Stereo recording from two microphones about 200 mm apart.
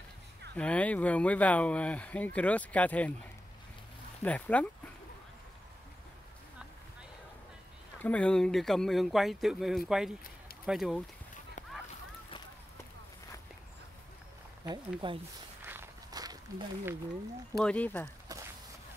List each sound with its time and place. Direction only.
0.6 s speech: 5° left (ahead or behind)
4.2 s speech: 5° left (ahead or behind)
8.0 s speech: 5° left (ahead or behind)
15.0 s speech: 25° right (ahead or behind)
15.6 s walk: 10° right (ahead or behind)
17.6 s speech: 5° left (ahead or behind)